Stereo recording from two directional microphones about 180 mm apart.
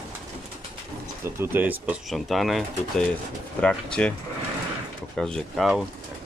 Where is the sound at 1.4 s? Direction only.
10° right (ahead or behind).